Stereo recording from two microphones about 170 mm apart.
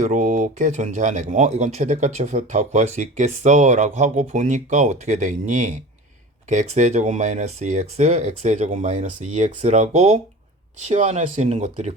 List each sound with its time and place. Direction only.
0.0 s speech: 45° right (ahead or behind)